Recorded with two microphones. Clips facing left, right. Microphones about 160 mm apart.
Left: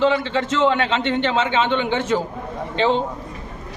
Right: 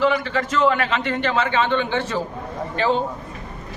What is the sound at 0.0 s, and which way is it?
A man's voice, 25° left (ahead or behind).